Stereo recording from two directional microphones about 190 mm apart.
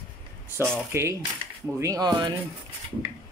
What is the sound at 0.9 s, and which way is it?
Speech, 15° right (ahead or behind).